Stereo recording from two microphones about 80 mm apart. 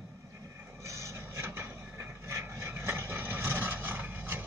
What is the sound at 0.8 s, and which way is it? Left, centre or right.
Vehicle, right.